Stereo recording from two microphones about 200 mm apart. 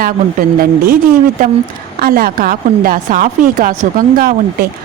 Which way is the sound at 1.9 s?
50° right (ahead or behind).